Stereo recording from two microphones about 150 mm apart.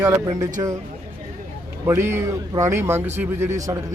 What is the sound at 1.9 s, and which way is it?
Speech, 15° right (ahead or behind).